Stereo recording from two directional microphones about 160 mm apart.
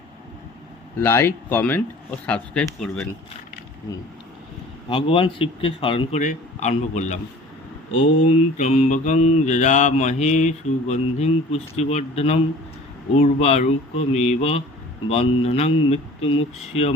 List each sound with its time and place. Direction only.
1.0 s speech: 15° left (ahead or behind)
4.9 s speech: 35° left (ahead or behind)
6.1 s mantra: 50° left (ahead or behind)
15.1 s speech: 40° left (ahead or behind)